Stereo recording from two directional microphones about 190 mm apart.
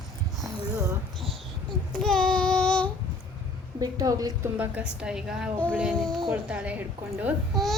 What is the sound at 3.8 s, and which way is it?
Speech, 20° right (ahead or behind).